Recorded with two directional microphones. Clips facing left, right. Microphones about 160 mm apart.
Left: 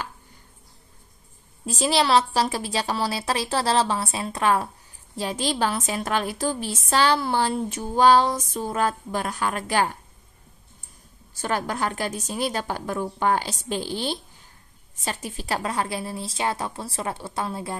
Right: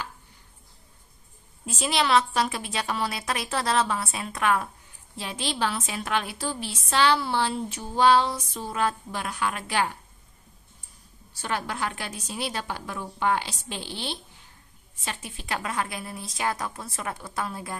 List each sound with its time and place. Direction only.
1.7 s a woman's voice: 35° left (ahead or behind)
11.3 s a woman's voice: 45° left (ahead or behind); by 17.7 s 25° left (ahead or behind)